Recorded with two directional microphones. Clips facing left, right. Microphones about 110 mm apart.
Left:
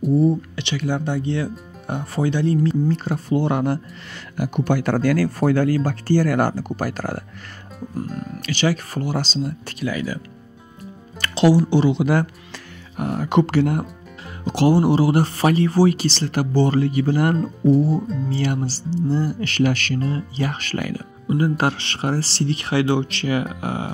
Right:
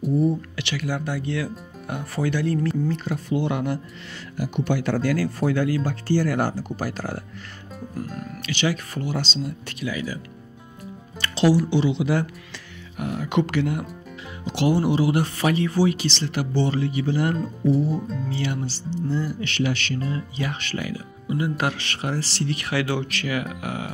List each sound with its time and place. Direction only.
0.4 s speech: 25° left (ahead or behind)
2.9 s speech: 40° left (ahead or behind)
8.2 s speech: 40° left (ahead or behind)
11.1 s music: 60° left (ahead or behind)
11.5 s speech: 45° left (ahead or behind)
12.9 s speech: 40° left (ahead or behind)
17.9 s speech: centre (ahead or behind)
18.3 s speech: 40° left (ahead or behind)